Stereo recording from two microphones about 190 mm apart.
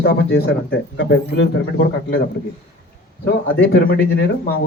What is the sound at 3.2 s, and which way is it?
Speech, 60° left (ahead or behind).